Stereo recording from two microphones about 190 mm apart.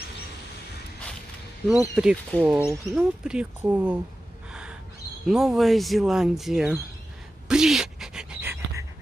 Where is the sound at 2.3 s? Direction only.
10° left (ahead or behind).